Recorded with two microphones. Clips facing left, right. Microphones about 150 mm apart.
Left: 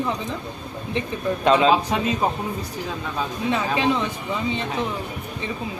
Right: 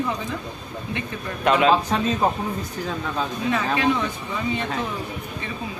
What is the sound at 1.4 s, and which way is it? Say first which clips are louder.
Speech: left 1 dB; 30° left (ahead or behind).